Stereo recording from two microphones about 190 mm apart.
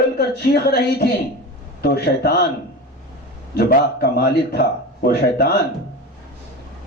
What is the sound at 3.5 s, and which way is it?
A man's voice, 55° left (ahead or behind).